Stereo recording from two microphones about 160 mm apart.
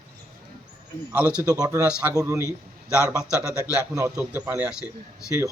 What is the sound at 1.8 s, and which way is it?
A man's voice, 10° right (ahead or behind).